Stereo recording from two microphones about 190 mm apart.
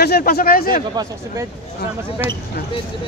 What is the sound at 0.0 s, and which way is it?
Speech, 55° left (ahead or behind).